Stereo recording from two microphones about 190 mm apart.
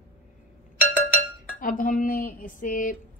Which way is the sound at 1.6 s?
45° left (ahead or behind).